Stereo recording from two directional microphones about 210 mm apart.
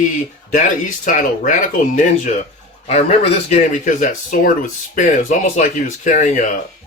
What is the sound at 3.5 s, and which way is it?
Speech, 35° left (ahead or behind).